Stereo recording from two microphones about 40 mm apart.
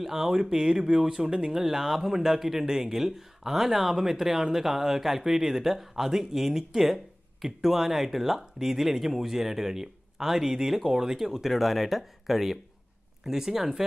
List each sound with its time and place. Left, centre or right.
0.0 s speech: centre
1.5 s speech: centre
11.5 s speech: centre